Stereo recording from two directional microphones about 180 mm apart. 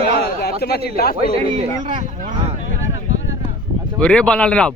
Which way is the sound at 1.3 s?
35° right (ahead or behind).